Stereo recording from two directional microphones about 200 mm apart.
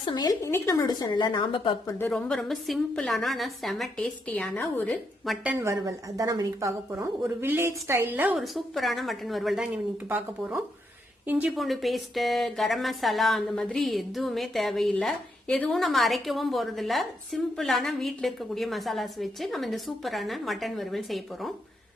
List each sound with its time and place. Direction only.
0.0 s a woman's voice: 20° left (ahead or behind)
2.0 s a woman's voice: 5° left (ahead or behind)